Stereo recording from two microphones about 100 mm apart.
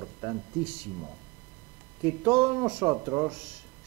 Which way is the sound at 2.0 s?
15° right (ahead or behind).